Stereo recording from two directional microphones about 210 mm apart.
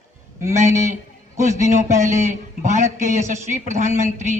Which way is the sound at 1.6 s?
35° right (ahead or behind).